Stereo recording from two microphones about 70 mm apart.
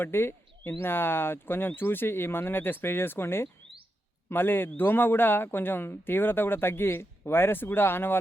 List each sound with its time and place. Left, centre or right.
0.0 s speech: left